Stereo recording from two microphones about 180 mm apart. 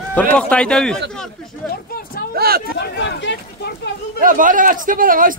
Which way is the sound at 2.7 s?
70° left (ahead or behind).